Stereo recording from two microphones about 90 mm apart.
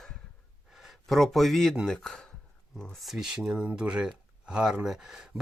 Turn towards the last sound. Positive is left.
turn(degrees=-5)  # may be behind; listen again after turning